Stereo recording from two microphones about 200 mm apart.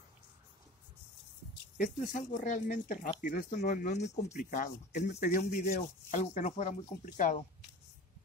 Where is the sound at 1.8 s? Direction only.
40° left (ahead or behind).